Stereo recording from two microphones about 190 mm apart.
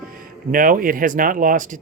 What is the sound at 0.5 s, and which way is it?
Speech, 45° right (ahead or behind).